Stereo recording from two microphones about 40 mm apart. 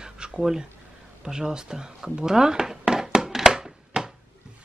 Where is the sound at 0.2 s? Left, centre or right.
Right.